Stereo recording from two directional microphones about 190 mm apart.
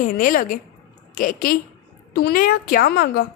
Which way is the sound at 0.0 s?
45° left (ahead or behind).